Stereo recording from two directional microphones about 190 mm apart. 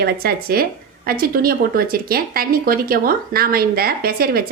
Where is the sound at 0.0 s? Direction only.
55° right (ahead or behind).